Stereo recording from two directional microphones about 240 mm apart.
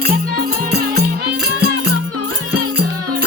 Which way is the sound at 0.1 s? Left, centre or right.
Right.